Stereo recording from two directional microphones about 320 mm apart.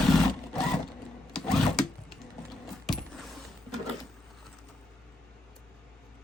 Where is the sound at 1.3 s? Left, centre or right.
Centre.